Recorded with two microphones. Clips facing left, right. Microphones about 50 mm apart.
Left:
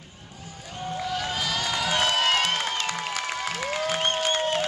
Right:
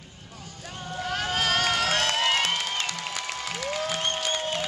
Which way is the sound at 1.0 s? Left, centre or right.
Right.